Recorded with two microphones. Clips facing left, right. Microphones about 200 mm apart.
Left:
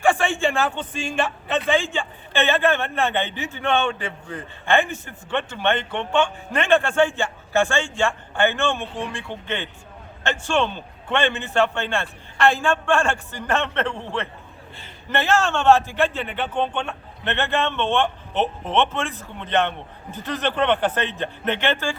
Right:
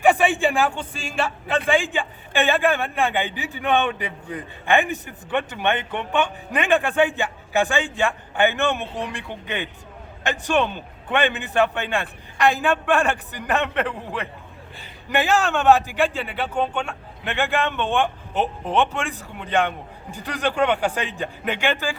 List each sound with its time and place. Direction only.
0.0 s a man's voice: 15° right (ahead or behind)